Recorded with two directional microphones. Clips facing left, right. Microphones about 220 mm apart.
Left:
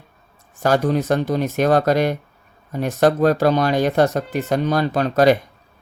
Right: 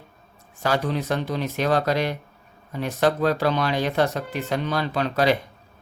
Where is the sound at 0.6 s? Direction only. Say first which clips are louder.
Left 6 dB; 45° left (ahead or behind).